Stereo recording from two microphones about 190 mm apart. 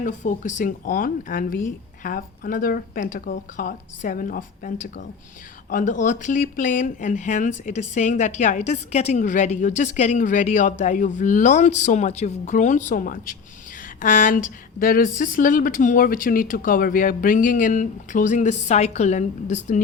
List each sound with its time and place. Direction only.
0.0 s speech: 40° left (ahead or behind)